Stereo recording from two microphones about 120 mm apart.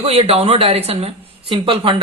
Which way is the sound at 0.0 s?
60° right (ahead or behind).